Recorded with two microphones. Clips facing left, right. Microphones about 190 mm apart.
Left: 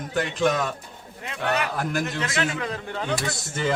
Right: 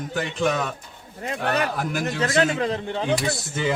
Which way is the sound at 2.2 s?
35° right (ahead or behind).